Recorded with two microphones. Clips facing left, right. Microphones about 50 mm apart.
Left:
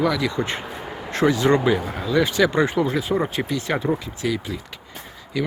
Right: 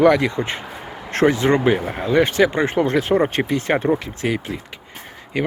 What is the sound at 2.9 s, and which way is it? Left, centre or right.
Speech, right.